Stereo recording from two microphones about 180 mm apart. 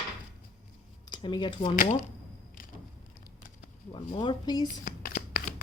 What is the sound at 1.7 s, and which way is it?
Speech, 45° left (ahead or behind).